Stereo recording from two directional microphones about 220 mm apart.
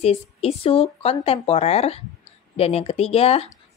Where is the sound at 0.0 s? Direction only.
25° left (ahead or behind).